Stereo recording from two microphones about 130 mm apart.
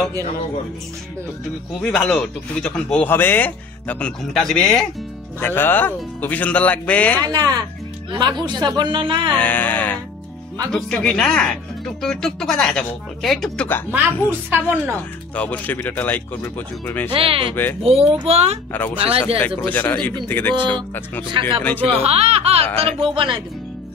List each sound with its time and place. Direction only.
1.8 s a man's voice: 5° left (ahead or behind)
4.2 s speech: centre (ahead or behind)
5.4 s a man's voice: 15° left (ahead or behind)
7.2 s speech: 30° right (ahead or behind)
9.4 s a man's voice: 15° left (ahead or behind)
13.7 s a man's voice: 15° left (ahead or behind)
14.5 s speech: 15° right (ahead or behind)
15.3 s a man's voice: 10° left (ahead or behind)
17.1 s a child's voice: 45° right (ahead or behind)
19.4 s a man's voice: 15° left (ahead or behind)
21.3 s a child's voice: 40° right (ahead or behind)